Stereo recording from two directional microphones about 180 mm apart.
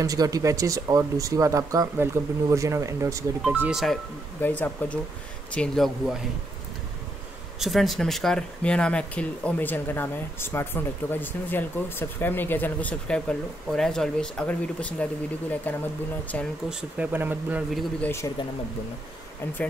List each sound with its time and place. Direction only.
0.0 s speech: 20° right (ahead or behind)
3.4 s speech: 5° right (ahead or behind)
7.5 s speech: centre (ahead or behind)
16.9 s speech: 10° right (ahead or behind)
18.0 s speech: 15° left (ahead or behind)